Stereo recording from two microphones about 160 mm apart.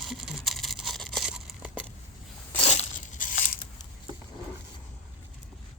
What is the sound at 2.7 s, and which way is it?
Tearing, 55° left (ahead or behind).